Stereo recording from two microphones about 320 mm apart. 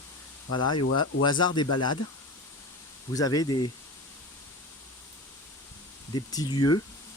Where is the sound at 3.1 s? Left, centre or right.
Centre.